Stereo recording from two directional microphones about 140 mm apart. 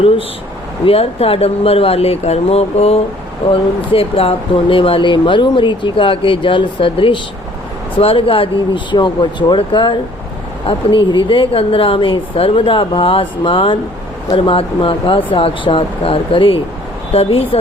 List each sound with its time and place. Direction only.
0.9 s speech: 45° left (ahead or behind)